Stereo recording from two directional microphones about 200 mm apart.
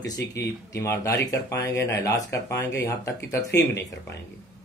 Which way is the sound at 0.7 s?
15° left (ahead or behind).